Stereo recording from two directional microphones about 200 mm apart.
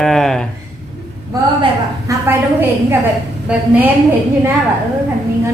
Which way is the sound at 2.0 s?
10° right (ahead or behind).